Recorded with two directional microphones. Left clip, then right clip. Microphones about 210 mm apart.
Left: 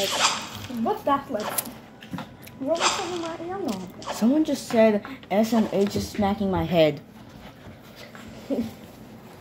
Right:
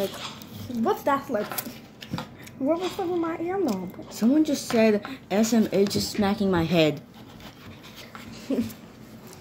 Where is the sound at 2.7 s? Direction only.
55° left (ahead or behind).